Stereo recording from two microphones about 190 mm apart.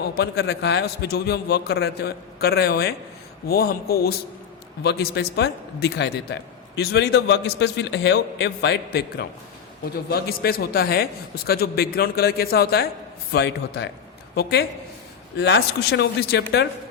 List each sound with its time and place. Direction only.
0.2 s a man's voice: 60° left (ahead or behind)